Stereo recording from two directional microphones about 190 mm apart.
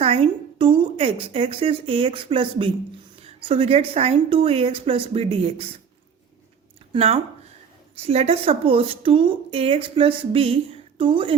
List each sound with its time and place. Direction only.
0.0 s a woman's voice: 30° right (ahead or behind)
6.9 s a woman's voice: 35° right (ahead or behind)